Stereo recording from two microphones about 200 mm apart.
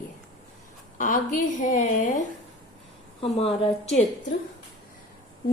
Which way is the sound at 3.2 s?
30° left (ahead or behind).